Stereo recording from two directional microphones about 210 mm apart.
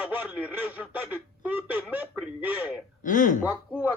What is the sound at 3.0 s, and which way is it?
Speech, 40° left (ahead or behind).